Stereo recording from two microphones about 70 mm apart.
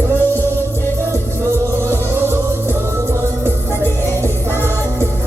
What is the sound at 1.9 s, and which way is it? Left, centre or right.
Music, right.